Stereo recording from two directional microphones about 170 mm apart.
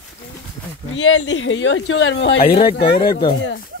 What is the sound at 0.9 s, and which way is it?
Speech, 90° left.